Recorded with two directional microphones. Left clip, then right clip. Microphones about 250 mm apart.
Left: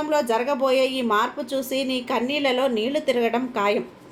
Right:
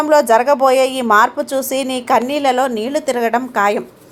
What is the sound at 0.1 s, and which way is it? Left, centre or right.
A woman's voice, right.